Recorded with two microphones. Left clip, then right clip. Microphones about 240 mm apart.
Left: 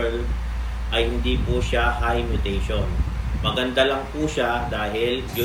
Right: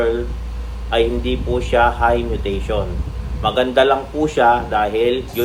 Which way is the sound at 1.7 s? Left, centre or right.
Right.